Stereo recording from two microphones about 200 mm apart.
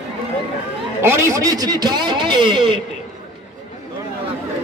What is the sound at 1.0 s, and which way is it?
A man's voice, 10° right (ahead or behind).